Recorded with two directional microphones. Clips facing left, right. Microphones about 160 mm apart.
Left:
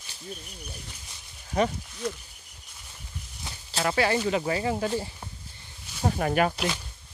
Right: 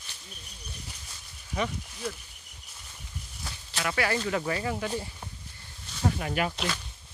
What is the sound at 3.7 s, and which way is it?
Speech, 35° left (ahead or behind).